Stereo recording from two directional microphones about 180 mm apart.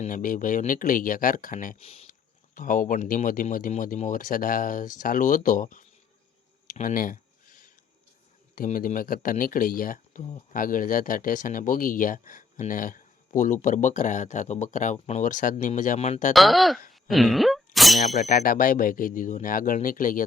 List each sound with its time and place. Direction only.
0.0 s speech: 50° left (ahead or behind)
1.8 s speech: 35° left (ahead or behind)
2.6 s speech: 50° left (ahead or behind)
6.7 s a sound: 50° left (ahead or behind)
8.5 s speech: 50° left (ahead or behind)
16.3 s speech: centre (ahead or behind)
16.9 s a sound: centre (ahead or behind)
18.2 s speech: 45° left (ahead or behind)